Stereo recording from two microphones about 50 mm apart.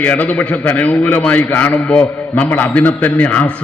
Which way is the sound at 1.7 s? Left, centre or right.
Centre.